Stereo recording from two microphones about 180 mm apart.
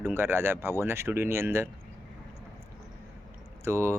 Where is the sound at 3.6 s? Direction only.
15° right (ahead or behind).